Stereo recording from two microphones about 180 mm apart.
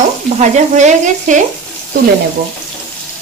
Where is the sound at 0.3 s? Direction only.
40° right (ahead or behind).